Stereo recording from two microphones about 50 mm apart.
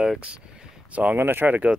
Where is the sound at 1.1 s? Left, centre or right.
Right.